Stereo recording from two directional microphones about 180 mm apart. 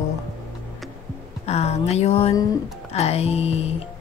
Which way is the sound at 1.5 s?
35° left (ahead or behind).